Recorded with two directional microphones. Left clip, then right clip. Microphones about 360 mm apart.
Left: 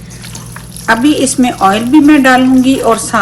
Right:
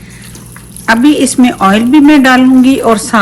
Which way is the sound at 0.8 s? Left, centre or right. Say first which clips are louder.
Right 2 dB; right.